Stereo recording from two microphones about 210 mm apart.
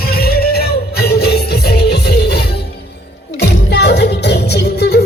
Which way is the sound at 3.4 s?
50° left (ahead or behind).